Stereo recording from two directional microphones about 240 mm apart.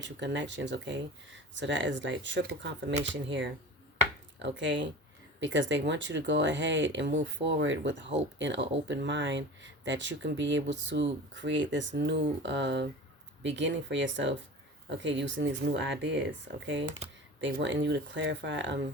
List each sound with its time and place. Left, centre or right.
0.0 s speech: right
17.5 s speech: right